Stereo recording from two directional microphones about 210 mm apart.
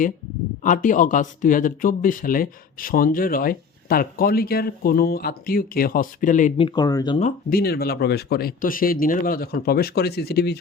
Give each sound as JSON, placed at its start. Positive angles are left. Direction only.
{"t": 0.6, "sound": "speech", "side_deg": 40}
{"t": 6.6, "sound": "speech", "side_deg": 20}
{"t": 7.2, "sound": "speech", "side_deg": 40}